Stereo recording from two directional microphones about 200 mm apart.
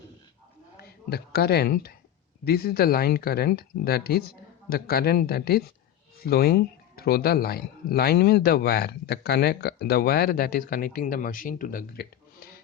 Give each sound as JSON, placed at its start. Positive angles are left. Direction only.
{"t": 0.8, "sound": "a woman's voice", "side_deg": 50}